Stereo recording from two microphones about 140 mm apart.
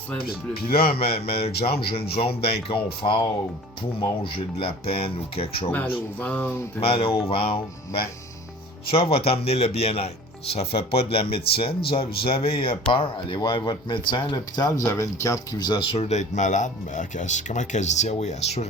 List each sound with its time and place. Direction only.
0.2 s speech: 90° left
0.9 s a man's voice: 45° left (ahead or behind)
6.1 s speech: 10° left (ahead or behind)
6.7 s speech: 40° left (ahead or behind)
8.9 s a man's voice: 45° left (ahead or behind)
16.0 s speech: 60° left (ahead or behind)